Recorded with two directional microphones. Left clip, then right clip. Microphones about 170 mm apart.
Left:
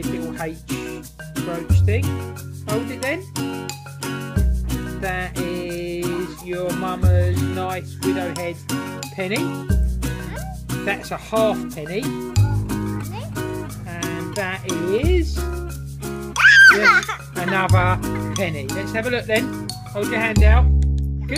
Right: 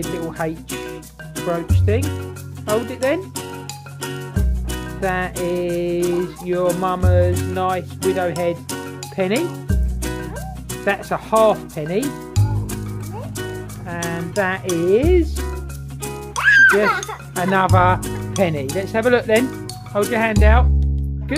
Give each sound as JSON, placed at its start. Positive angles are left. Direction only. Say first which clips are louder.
{"t": 0.0, "sound": "speech", "louder": "right 3 dB", "side_deg": 0}
{"t": 13.4, "sound": "music", "louder": "left 3 dB", "side_deg": 0}
{"t": 16.4, "sound": "music", "louder": "left 2 dB", "side_deg": 20}
{"t": 17.4, "sound": "speech", "louder": "right 5 dB", "side_deg": 5}